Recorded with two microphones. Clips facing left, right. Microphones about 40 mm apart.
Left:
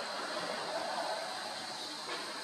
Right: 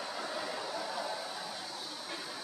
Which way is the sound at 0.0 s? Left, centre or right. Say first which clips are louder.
Even; left.